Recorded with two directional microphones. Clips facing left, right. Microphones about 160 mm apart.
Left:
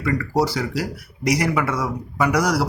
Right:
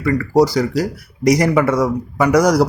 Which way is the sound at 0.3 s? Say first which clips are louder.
Right 9 dB; 40° right (ahead or behind).